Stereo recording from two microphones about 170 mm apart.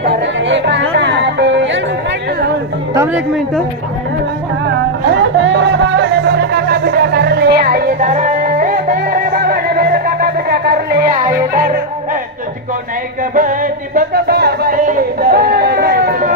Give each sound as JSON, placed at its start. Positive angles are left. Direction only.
{"t": 0.0, "sound": "music", "side_deg": -85}
{"t": 2.9, "sound": "speech", "side_deg": -15}
{"t": 4.6, "sound": "music", "side_deg": -90}
{"t": 8.0, "sound": "music", "side_deg": -45}
{"t": 11.5, "sound": "yodeling", "side_deg": -50}
{"t": 13.3, "sound": "music", "side_deg": -50}